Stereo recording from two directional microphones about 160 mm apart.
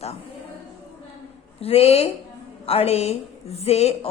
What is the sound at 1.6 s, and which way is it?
A woman's voice, 40° left (ahead or behind).